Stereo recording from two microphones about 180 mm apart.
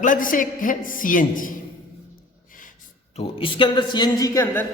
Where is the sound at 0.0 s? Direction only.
50° left (ahead or behind).